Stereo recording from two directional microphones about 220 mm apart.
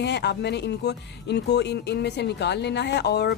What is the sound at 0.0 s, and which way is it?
Speech, 50° left (ahead or behind).